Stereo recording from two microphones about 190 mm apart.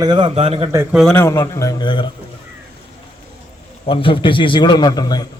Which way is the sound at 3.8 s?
30° left (ahead or behind).